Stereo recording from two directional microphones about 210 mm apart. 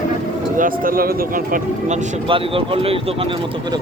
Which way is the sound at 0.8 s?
45° right (ahead or behind).